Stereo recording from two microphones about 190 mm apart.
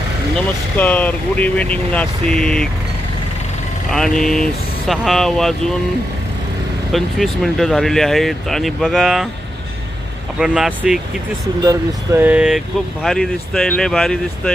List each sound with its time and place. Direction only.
0.8 s speech: 10° left (ahead or behind)
3.8 s speech: centre (ahead or behind)
6.9 s speech: centre (ahead or behind)
10.4 s speech: 5° right (ahead or behind)
11.6 s speech: 15° right (ahead or behind); by 14.5 s 5° left (ahead or behind)